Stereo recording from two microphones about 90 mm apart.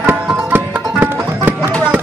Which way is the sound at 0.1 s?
20° right (ahead or behind).